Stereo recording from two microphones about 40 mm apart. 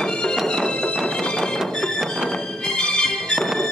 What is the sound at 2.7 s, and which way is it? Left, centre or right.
Music, left.